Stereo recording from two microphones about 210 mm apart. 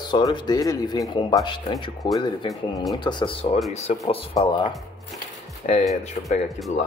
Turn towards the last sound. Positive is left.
turn(degrees=0)  # may be behind; listen again after turning